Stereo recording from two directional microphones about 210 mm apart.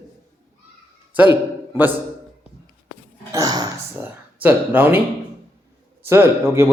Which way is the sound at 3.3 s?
15° right (ahead or behind).